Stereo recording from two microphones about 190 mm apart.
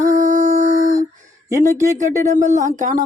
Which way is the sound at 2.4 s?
40° right (ahead or behind).